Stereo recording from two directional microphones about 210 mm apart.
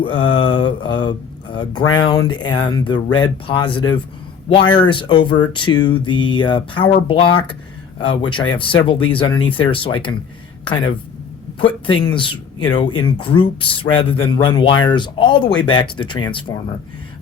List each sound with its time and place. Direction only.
0.0 s speech: 20° left (ahead or behind)